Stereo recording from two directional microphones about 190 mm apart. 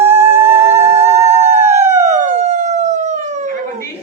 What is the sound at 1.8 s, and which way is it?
Police car, 15° right (ahead or behind).